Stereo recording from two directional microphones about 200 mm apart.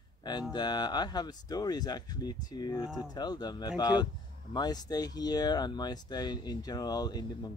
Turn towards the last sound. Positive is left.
turn(degrees=20)  # may be behind; listen again after turning